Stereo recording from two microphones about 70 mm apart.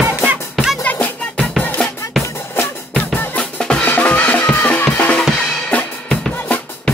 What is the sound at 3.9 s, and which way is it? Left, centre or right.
Music, left.